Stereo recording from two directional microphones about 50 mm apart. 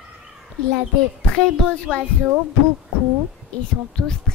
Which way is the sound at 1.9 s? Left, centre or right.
Left.